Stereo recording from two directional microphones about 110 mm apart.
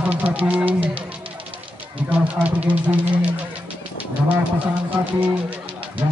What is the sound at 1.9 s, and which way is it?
Speech, 15° right (ahead or behind).